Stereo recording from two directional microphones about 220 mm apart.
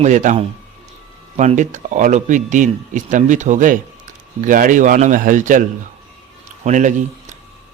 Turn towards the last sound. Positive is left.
turn(degrees=-35)  # may be behind; listen again after turning